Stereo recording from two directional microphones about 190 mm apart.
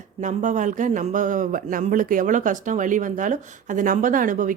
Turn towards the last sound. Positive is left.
turn(degrees=-45)  # may be behind; listen again after turning